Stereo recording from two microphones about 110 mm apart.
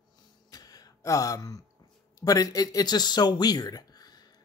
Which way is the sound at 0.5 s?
35° left (ahead or behind).